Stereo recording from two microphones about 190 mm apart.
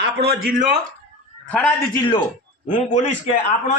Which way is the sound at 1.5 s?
10° left (ahead or behind).